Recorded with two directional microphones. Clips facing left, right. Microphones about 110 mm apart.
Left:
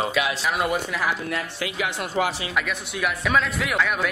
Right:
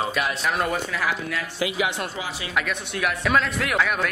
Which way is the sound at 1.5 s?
10° right (ahead or behind).